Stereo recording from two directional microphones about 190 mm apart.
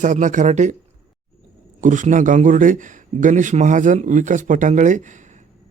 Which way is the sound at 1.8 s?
40° right (ahead or behind).